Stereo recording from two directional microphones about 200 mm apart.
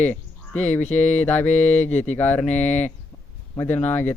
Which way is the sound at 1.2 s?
10° left (ahead or behind).